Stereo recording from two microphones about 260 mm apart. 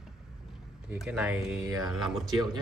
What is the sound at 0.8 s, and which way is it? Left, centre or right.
Speech, centre.